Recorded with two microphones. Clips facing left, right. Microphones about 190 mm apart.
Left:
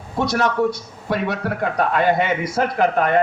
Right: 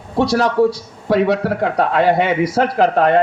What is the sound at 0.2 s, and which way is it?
Speech, 35° right (ahead or behind).